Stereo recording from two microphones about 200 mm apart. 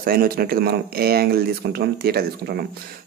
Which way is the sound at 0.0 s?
50° right (ahead or behind).